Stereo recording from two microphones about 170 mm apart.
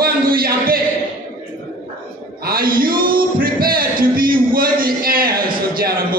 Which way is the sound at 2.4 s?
60° right (ahead or behind).